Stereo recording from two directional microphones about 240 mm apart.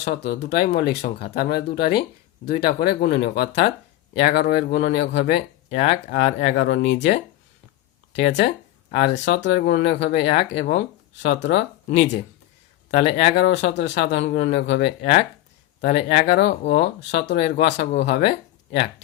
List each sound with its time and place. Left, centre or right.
0.0 s speech: left
8.2 s speech: left